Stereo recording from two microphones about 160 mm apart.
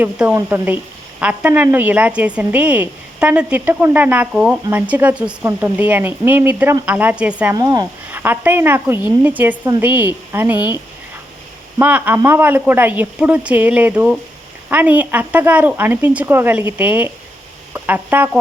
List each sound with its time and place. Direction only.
0.0 s a woman's voice: 10° right (ahead or behind)
7.5 s speech: 25° right (ahead or behind)
8.1 s a woman's voice: 10° right (ahead or behind)
11.8 s a woman's voice: 10° right (ahead or behind)